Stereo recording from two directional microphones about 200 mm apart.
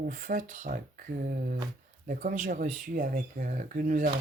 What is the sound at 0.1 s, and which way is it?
Speech, 45° right (ahead or behind).